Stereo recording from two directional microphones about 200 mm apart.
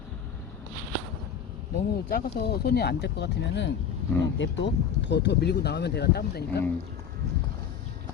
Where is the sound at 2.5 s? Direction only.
55° left (ahead or behind).